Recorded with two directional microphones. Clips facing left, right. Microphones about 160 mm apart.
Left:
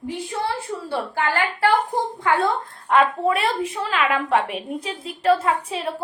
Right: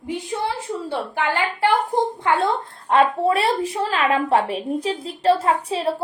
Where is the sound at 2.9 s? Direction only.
30° right (ahead or behind).